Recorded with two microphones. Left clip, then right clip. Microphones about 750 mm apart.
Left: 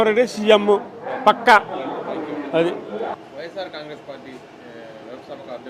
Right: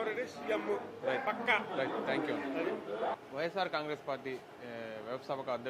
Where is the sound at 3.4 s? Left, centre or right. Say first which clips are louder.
Left 4 dB; right.